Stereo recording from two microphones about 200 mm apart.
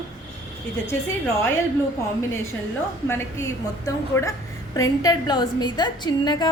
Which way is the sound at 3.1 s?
15° left (ahead or behind).